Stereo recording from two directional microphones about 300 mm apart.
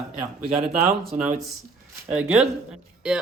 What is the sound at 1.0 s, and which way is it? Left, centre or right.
Speech, centre.